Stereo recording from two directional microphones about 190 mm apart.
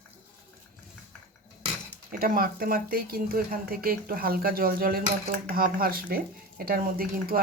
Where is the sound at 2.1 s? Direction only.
50° right (ahead or behind).